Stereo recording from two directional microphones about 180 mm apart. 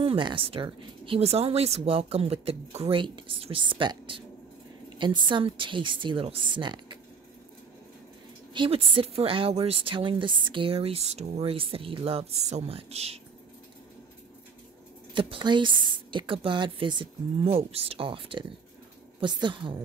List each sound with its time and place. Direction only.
0.0 s a woman's voice: 30° right (ahead or behind)
8.5 s a woman's voice: 30° right (ahead or behind)
15.1 s a woman's voice: 30° right (ahead or behind)